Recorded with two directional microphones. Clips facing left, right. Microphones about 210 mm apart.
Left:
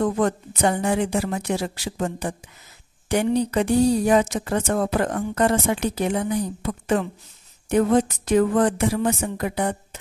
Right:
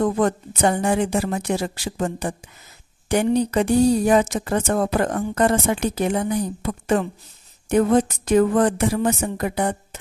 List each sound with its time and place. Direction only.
0.0 s speech: 45° right (ahead or behind)